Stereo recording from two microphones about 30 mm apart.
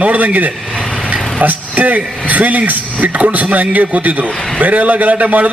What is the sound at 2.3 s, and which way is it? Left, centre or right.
A man's voice, right.